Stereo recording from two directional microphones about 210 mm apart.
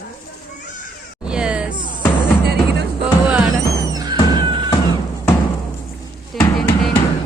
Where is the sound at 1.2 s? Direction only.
5° right (ahead or behind).